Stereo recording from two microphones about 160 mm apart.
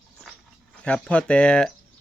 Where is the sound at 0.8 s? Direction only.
10° left (ahead or behind).